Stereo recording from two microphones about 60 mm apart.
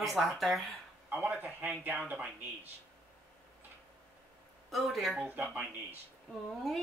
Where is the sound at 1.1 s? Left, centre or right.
Right.